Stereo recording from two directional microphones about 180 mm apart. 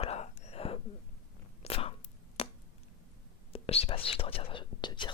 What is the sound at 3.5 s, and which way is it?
Whispering, 35° left (ahead or behind).